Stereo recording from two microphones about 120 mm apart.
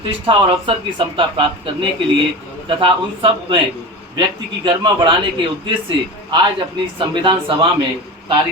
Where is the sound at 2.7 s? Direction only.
45° right (ahead or behind).